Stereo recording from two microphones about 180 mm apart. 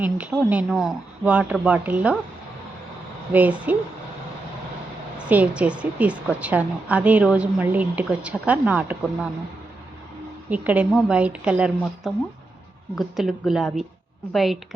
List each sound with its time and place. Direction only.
0.0 s a woman's voice: 10° right (ahead or behind)
3.7 s a woman's voice: 10° right (ahead or behind)
5.1 s a woman's voice: 5° right (ahead or behind)
10.5 s a woman's voice: 10° right (ahead or behind)